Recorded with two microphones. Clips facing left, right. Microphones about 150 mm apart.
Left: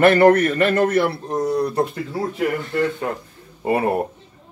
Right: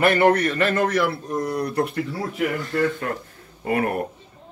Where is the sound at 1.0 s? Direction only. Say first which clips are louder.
Left 2 dB; 30° left (ahead or behind).